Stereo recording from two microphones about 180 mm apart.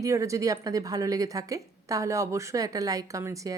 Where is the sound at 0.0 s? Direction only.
15° right (ahead or behind).